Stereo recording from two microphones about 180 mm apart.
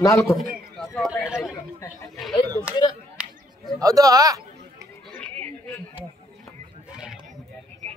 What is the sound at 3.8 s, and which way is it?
Speech, 20° right (ahead or behind).